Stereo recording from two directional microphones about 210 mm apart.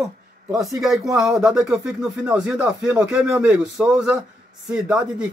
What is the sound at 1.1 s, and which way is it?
Speech, centre (ahead or behind).